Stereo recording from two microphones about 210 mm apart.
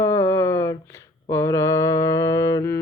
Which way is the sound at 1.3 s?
10° left (ahead or behind).